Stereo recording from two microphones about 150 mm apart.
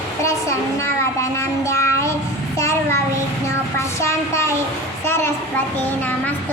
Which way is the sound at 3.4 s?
20° left (ahead or behind).